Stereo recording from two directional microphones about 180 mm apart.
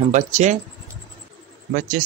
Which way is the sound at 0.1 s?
40° right (ahead or behind).